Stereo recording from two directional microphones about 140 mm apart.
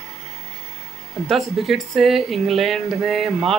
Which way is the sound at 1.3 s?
Centre (ahead or behind).